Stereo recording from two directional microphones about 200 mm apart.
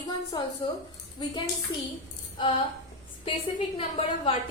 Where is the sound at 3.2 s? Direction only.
25° left (ahead or behind).